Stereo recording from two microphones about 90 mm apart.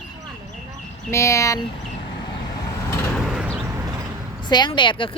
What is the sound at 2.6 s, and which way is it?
Vehicle, 40° left (ahead or behind).